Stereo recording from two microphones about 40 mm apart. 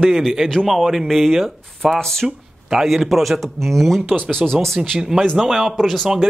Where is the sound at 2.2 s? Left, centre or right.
Centre.